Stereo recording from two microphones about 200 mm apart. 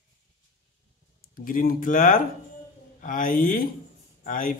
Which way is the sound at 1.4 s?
45° left (ahead or behind).